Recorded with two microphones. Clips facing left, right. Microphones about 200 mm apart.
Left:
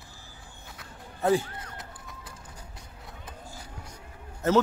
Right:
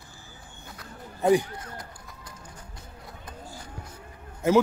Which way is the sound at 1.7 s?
5° left (ahead or behind).